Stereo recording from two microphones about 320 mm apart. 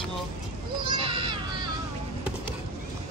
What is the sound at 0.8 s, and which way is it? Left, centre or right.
Children playing, centre.